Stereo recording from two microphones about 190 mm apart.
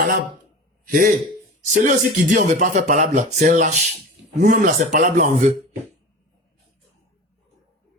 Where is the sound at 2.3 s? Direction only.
40° right (ahead or behind).